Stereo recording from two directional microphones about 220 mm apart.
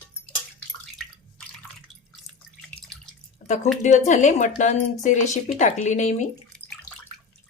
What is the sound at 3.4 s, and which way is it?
Speech, 35° left (ahead or behind).